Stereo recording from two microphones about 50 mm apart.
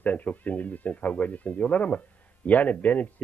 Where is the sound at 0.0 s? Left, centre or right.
Left.